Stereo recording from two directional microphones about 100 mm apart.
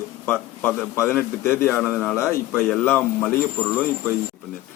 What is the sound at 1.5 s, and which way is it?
Speech, 5° right (ahead or behind).